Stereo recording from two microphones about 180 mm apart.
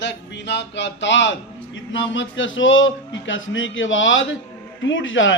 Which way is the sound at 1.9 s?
90° left.